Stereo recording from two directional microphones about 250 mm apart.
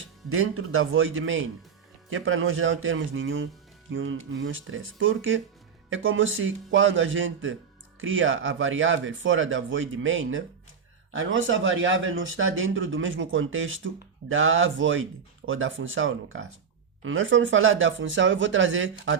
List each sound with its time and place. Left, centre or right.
0.0 s speech: right